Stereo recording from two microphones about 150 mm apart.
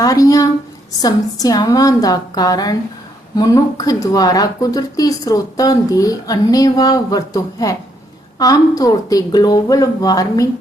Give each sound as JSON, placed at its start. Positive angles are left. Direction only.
{"t": 0.0, "sound": "speech", "side_deg": 25}